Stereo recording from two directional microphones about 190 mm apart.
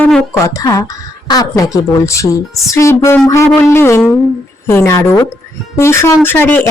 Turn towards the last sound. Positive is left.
turn(degrees=10)  # may be behind; listen again after turning